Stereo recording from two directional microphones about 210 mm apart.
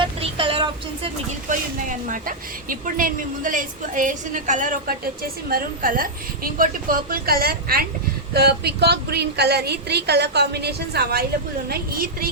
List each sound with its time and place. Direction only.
0.0 s vehicle: 25° right (ahead or behind)
1.5 s a woman's voice: 40° right (ahead or behind)